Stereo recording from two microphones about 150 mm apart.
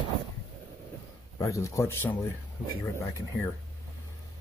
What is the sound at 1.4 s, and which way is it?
Speech, 20° left (ahead or behind).